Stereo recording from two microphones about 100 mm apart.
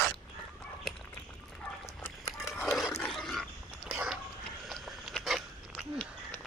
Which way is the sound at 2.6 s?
Centre (ahead or behind).